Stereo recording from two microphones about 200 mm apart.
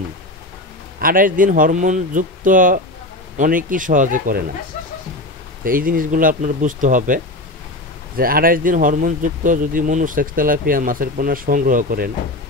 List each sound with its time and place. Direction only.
0.9 s speech: 45° right (ahead or behind)
5.6 s speech: 45° right (ahead or behind)
8.2 s speech: 45° right (ahead or behind)